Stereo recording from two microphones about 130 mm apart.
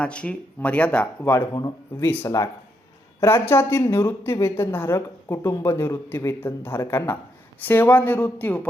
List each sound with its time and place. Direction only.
0.0 s speech: 10° left (ahead or behind)
1.2 s a woman's voice: 20° left (ahead or behind)